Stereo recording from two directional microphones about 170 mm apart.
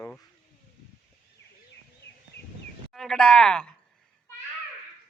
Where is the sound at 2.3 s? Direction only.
70° left (ahead or behind).